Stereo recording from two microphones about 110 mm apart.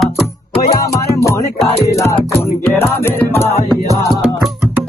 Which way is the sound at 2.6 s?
20° left (ahead or behind).